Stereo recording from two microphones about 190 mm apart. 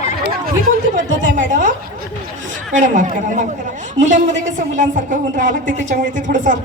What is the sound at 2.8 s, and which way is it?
A man's voice, 40° right (ahead or behind).